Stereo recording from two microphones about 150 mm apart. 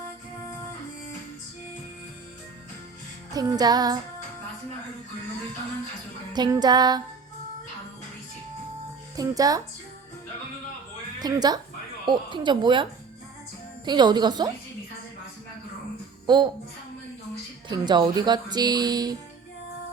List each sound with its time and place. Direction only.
3.3 s speech: 25° right (ahead or behind)
6.3 s speech: 30° right (ahead or behind)
9.1 s speech: 25° right (ahead or behind)
11.2 s a woman's voice: 25° right (ahead or behind)
16.2 s a child's voice: 30° right (ahead or behind)
17.7 s speech: 30° right (ahead or behind)